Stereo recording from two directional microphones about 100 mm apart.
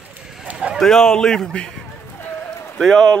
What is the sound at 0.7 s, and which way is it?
A man's voice, 5° left (ahead or behind).